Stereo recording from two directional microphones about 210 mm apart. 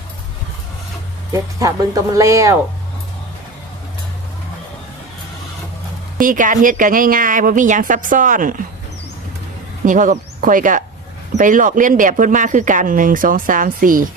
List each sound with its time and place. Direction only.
1.3 s speech: 15° right (ahead or behind)
6.1 s speech: 40° right (ahead or behind)
9.8 s speech: 40° right (ahead or behind)